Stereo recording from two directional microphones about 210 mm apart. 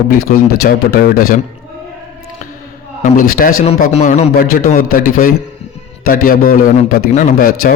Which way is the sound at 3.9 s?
30° left (ahead or behind).